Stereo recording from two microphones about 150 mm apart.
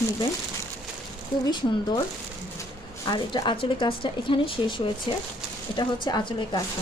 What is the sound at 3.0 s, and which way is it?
Speech, 30° left (ahead or behind).